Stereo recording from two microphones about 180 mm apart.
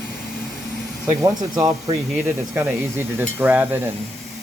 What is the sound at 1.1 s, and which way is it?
Speech, 20° right (ahead or behind).